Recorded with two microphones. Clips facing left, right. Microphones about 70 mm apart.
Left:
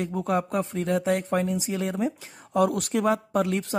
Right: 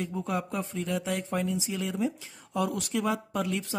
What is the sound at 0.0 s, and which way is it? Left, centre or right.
Speech, left.